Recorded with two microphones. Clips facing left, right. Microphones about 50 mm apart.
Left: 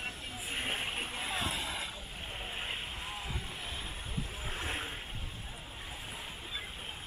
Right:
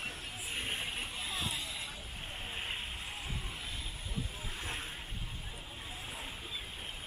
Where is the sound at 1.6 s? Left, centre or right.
Left.